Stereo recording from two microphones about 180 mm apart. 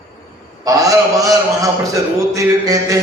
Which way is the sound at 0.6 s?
20° right (ahead or behind).